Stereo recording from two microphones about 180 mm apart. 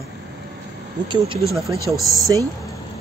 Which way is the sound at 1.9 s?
Centre (ahead or behind).